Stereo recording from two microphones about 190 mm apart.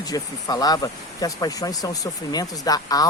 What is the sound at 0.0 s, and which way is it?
Speech, 20° left (ahead or behind).